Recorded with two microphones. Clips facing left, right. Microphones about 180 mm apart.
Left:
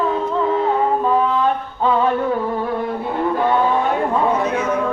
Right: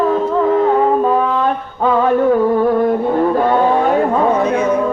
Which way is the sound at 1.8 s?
45° right (ahead or behind).